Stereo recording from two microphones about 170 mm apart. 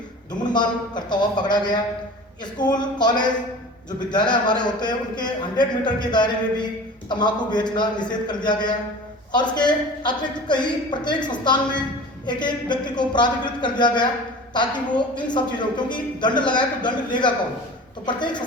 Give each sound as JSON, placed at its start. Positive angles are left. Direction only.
{"t": 0.5, "sound": "a woman's voice", "side_deg": 25}